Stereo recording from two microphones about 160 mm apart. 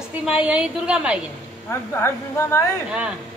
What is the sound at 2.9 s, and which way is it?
Speech, 5° right (ahead or behind).